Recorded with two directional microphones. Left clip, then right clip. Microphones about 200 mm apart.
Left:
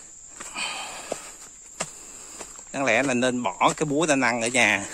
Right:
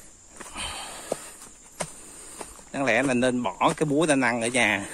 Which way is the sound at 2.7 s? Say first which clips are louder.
Left 1 dB; 25° left (ahead or behind).